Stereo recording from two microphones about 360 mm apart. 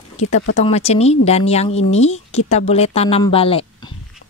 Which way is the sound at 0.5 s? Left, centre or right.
Centre.